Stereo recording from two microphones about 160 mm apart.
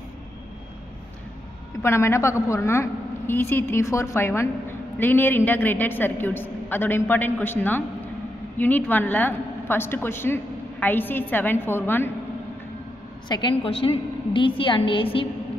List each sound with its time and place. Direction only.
1.8 s a woman's voice: 15° left (ahead or behind)
13.3 s a woman's voice: 30° left (ahead or behind)